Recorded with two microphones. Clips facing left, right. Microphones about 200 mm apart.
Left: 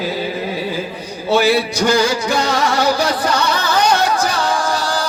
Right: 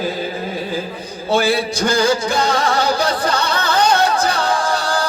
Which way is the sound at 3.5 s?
55° right (ahead or behind).